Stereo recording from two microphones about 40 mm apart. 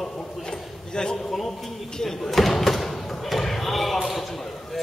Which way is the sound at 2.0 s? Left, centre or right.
Centre.